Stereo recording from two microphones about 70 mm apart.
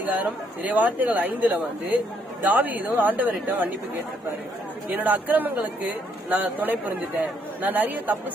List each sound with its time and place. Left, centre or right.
0.1 s speech: right
4.9 s speech: right